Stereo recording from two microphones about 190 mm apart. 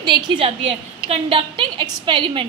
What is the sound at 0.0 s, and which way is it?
A woman's voice, 25° right (ahead or behind).